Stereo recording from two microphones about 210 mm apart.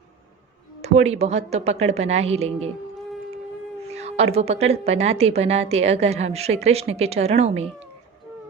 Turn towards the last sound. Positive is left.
turn(degrees=-30)  # may be behind; listen again after turning